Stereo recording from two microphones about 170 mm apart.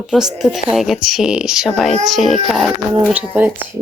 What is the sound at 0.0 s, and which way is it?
Speech, 5° right (ahead or behind).